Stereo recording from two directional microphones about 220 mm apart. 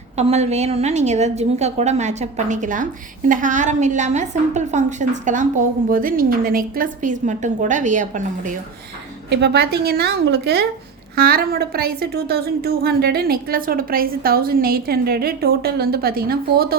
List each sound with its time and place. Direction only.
0.2 s a woman's voice: 30° right (ahead or behind)
9.3 s a woman's voice: 50° right (ahead or behind)